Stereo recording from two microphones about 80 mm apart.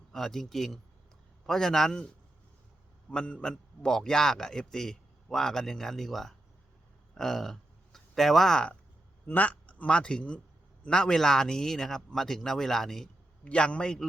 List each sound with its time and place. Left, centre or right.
0.1 s speech: centre
3.1 s a man's voice: centre
13.4 s a man's voice: centre